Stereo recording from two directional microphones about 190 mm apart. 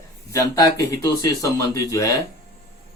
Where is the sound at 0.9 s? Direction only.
20° left (ahead or behind).